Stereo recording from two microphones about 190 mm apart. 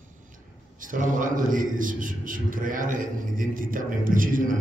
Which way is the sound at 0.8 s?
45° right (ahead or behind).